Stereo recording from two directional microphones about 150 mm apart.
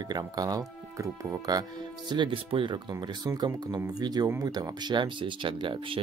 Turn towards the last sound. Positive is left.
turn(degrees=-35)  # may be behind; listen again after turning